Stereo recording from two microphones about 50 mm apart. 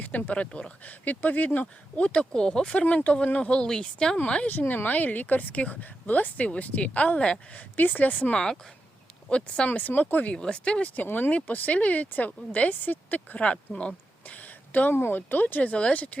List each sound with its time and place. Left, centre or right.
0.0 s speech: left; by 4.2 s centre
4.7 s a woman's voice: left
7.5 s a woman's voice: left
10.3 s a woman's voice: centre